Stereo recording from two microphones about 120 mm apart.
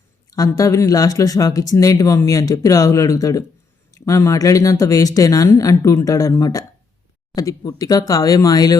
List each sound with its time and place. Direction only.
0.3 s speech: 30° left (ahead or behind)